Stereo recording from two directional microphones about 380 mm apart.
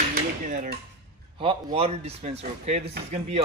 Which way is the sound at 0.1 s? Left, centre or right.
Right.